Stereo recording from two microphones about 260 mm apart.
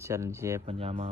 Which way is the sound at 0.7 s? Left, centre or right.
Right.